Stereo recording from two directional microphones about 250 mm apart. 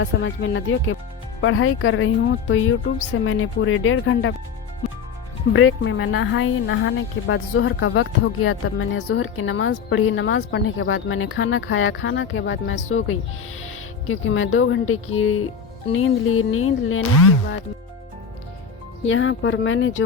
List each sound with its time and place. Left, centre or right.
0.0 s a woman's voice: left
5.5 s a woman's voice: left
19.0 s a woman's voice: left